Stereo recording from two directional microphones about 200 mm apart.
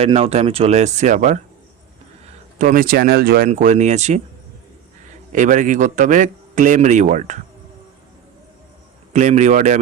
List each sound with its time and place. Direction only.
0.0 s a man's voice: 30° right (ahead or behind)
2.6 s a man's voice: 40° right (ahead or behind)
5.3 s a man's voice: 40° right (ahead or behind)
9.1 s a man's voice: 35° right (ahead or behind)